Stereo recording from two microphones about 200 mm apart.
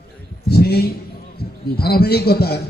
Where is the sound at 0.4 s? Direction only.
50° left (ahead or behind).